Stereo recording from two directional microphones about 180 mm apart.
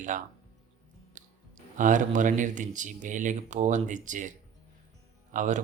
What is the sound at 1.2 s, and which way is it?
Clicking, 45° right (ahead or behind).